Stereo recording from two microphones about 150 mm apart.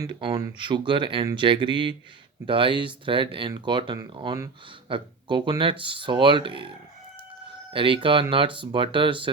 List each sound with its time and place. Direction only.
0.0 s speech: 30° right (ahead or behind)
7.7 s speech: 35° right (ahead or behind)